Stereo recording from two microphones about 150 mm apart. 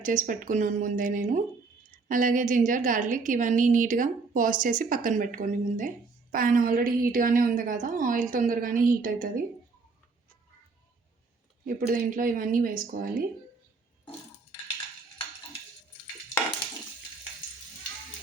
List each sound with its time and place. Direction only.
0.0 s a woman's voice: 60° right (ahead or behind)
11.6 s a woman's voice: 70° right (ahead or behind)